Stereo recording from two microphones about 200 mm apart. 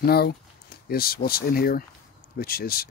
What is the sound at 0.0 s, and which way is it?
Speech, 50° left (ahead or behind).